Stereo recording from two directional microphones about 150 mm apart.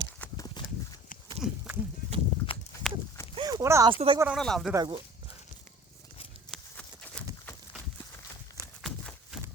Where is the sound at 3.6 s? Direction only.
20° right (ahead or behind).